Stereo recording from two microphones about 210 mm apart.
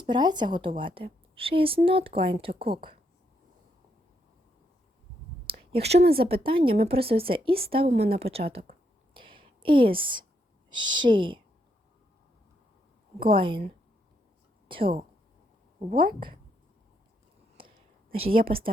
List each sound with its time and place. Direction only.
0.0 s a woman's voice: 20° right (ahead or behind)
5.5 s a sound: 30° right (ahead or behind)
6.0 s speech: 45° right (ahead or behind)
6.2 s a woman's voice: 25° right (ahead or behind)
9.1 s a sound: 25° right (ahead or behind)
10.0 s a woman's voice: 25° right (ahead or behind)
13.2 s a woman's voice: 25° right (ahead or behind)
14.7 s a woman's voice: 25° right (ahead or behind)
18.1 s a woman's voice: 25° right (ahead or behind)